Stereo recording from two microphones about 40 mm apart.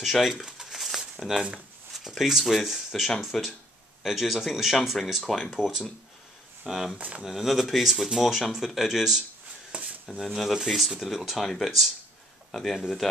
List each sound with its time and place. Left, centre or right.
0.0 s speech: centre
0.5 s a sound: centre
0.7 s a sound: centre
2.0 s speech: centre
3.3 s speech: centre
4.0 s speech: centre
6.6 s speech: centre
7.0 s speech: right
7.2 s speech: centre
9.7 s a sound: right
10.0 s speech: centre
10.5 s speech: centre